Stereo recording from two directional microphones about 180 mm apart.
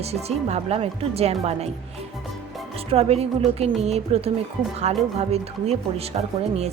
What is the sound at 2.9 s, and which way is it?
Speech, 35° right (ahead or behind).